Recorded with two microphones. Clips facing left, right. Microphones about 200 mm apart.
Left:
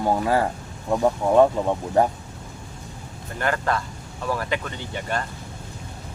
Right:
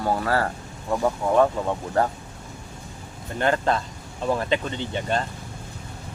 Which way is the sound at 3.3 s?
25° right (ahead or behind).